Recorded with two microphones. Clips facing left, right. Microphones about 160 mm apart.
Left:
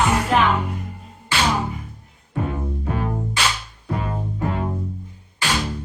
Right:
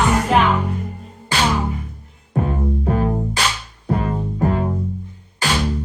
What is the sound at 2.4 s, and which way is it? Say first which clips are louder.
Music: right 5 dB; 40° right (ahead or behind).